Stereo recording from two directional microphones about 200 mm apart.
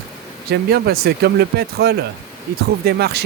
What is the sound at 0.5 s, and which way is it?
Speech, 50° right (ahead or behind).